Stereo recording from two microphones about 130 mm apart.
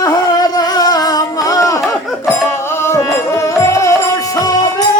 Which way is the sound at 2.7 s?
20° left (ahead or behind).